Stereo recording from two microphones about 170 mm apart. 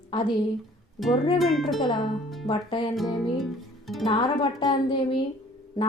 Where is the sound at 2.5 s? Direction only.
35° left (ahead or behind).